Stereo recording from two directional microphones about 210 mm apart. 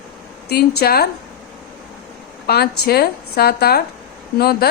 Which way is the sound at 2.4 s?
50° left (ahead or behind).